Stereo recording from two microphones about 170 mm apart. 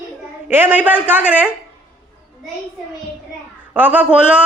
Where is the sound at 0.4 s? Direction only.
10° right (ahead or behind).